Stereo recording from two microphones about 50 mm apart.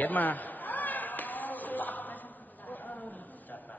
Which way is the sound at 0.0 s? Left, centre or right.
Left.